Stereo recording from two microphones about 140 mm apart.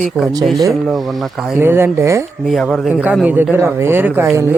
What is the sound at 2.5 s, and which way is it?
Speech, centre (ahead or behind).